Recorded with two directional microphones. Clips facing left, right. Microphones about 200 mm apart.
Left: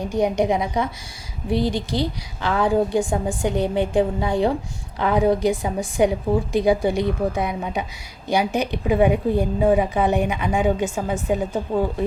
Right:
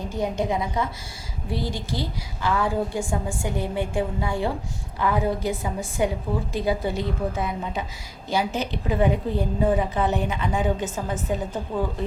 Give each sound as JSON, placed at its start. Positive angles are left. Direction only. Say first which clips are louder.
{"t": 0.0, "sound": "a woman's voice", "louder": "left 6 dB", "side_deg": 15}